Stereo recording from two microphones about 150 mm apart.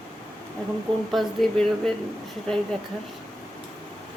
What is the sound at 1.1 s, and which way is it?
Speech, 5° left (ahead or behind).